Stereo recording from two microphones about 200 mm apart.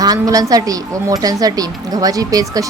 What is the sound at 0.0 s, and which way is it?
A woman's voice, 20° right (ahead or behind).